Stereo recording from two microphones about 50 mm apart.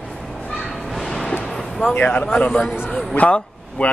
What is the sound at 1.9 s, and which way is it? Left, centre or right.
A man's voice, left.